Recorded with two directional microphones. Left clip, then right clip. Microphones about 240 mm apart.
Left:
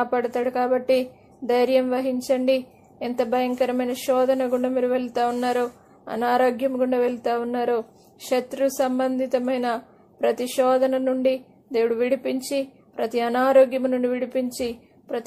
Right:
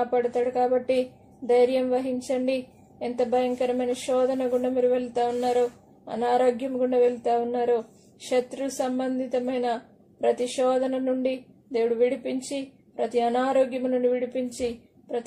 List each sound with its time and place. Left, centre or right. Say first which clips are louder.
0.0 s a woman's voice: left 1 dB; left
8.3 s a woman's voice: left 4 dB; left